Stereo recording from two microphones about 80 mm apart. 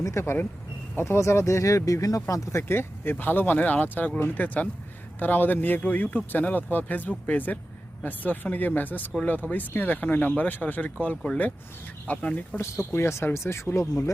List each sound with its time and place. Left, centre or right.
0.0 s speech: left; by 12.5 s centre
12.9 s speech: left